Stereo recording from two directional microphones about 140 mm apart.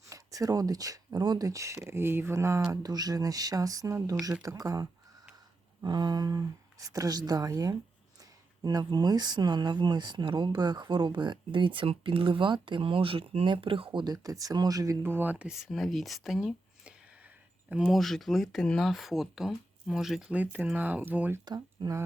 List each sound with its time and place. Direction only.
0.1 s speech: 25° right (ahead or behind)
21.4 s speech: 30° right (ahead or behind)